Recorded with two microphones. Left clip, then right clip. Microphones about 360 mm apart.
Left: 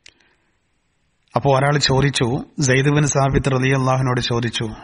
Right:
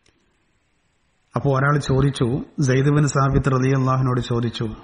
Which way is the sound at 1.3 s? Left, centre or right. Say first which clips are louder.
Left 4 dB; centre.